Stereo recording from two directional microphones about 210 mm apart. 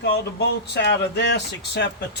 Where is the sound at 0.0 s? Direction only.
55° left (ahead or behind).